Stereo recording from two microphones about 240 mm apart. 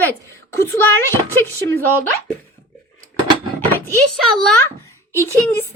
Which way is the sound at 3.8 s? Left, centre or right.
Centre.